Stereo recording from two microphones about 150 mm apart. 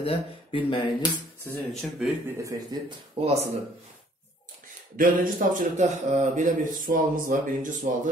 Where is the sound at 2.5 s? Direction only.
30° right (ahead or behind).